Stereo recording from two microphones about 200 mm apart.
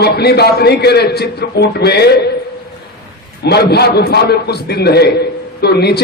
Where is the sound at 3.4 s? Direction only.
55° left (ahead or behind).